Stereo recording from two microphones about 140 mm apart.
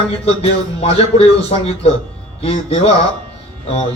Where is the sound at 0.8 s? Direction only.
45° left (ahead or behind).